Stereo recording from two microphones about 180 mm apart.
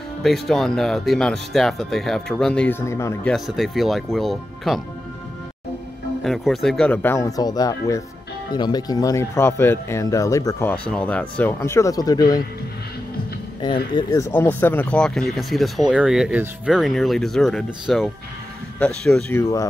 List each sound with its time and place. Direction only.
0.2 s speech: centre (ahead or behind)
3.3 s speech: centre (ahead or behind)
6.2 s speech: centre (ahead or behind); by 12.4 s 20° left (ahead or behind)
13.9 s speech: 15° left (ahead or behind)